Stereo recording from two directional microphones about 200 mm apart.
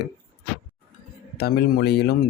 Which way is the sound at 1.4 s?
50° left (ahead or behind).